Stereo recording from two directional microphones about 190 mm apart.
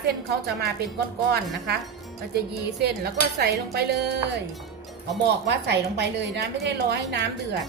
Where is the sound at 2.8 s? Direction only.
60° right (ahead or behind).